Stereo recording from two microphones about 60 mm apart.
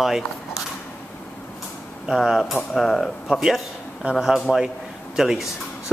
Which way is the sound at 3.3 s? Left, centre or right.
Centre.